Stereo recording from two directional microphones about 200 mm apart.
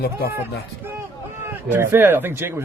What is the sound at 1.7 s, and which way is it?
Speech, 10° right (ahead or behind).